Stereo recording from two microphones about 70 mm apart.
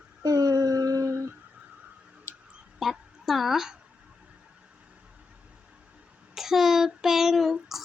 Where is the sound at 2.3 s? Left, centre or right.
Left.